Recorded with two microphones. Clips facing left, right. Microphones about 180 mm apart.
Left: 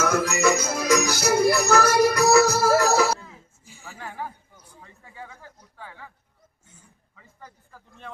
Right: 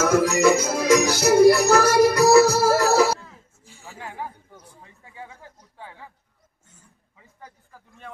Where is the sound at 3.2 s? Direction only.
Centre (ahead or behind).